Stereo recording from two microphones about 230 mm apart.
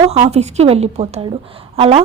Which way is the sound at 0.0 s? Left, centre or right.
Right.